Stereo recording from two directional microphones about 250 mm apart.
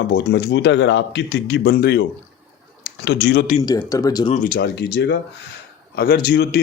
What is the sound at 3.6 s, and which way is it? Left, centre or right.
Speech, centre.